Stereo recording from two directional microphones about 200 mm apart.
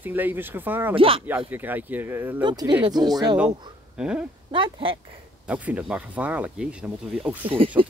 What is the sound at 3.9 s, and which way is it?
Speech, 5° right (ahead or behind).